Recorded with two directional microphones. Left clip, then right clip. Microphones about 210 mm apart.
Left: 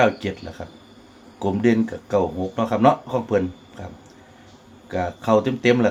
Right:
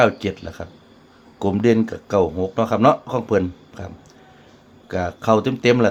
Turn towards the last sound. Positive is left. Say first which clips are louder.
# right 2 dB
turn(degrees=-40)  # may be behind; listen again after turning